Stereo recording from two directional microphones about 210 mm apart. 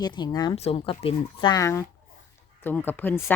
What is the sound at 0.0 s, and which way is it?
Speech, 20° left (ahead or behind).